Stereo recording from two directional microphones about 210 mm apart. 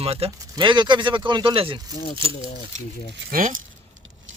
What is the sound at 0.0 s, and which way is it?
Speech, 30° right (ahead or behind).